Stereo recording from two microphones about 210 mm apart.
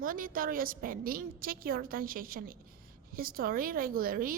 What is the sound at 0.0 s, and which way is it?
A woman's voice, 40° right (ahead or behind).